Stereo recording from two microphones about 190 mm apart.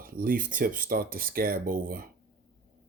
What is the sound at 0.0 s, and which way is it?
Speech, 50° right (ahead or behind).